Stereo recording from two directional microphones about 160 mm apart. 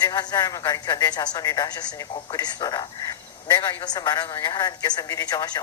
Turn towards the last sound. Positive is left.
turn(degrees=20)  # may be behind; listen again after turning